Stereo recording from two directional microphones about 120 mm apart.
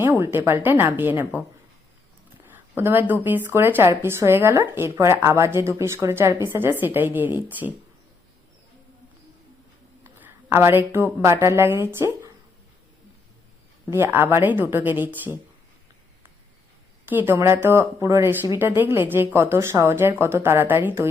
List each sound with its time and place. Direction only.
0.0 s speech: 20° right (ahead or behind)
10.2 s a woman's voice: 20° right (ahead or behind)
13.9 s speech: 20° right (ahead or behind)
17.1 s speech: 20° right (ahead or behind)